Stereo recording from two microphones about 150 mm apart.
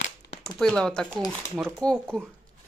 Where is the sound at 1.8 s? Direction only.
5° left (ahead or behind).